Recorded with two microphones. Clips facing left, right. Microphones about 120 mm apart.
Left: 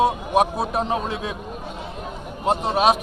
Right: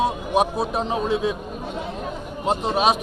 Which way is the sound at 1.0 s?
30° right (ahead or behind).